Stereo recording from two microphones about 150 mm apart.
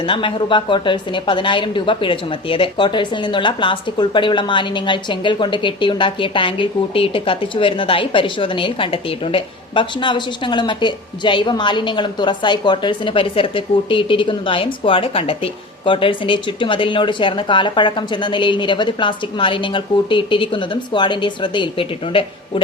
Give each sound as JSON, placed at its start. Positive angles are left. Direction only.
{"t": 0.0, "sound": "a woman's voice", "side_deg": 35}